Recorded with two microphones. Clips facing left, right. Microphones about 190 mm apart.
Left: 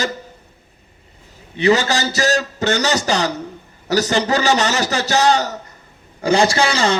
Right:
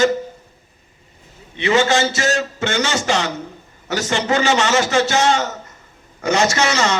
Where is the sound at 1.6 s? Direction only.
35° left (ahead or behind).